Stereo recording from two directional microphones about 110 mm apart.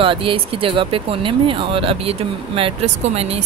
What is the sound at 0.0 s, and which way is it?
Speech, 50° right (ahead or behind).